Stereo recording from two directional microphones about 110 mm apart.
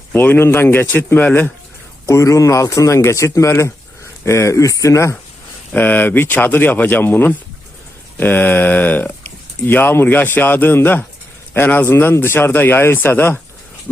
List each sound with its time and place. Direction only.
0.1 s speech: 20° left (ahead or behind)
2.0 s a man's voice: 30° left (ahead or behind)
5.7 s a man's voice: 15° left (ahead or behind)